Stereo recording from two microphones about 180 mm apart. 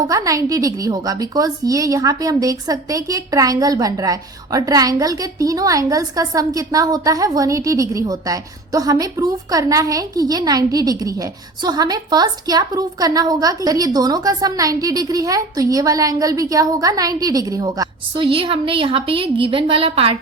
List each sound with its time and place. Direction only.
0.1 s a woman's voice: 20° right (ahead or behind)